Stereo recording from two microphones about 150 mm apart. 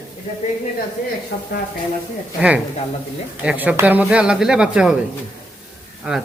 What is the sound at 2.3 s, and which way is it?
Speech, 5° right (ahead or behind).